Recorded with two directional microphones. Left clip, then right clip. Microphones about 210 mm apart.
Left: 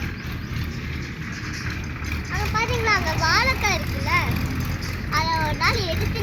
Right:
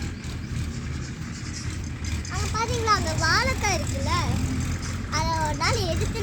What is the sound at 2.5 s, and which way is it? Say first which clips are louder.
Vehicle: left 2 dB; 55° right (ahead or behind).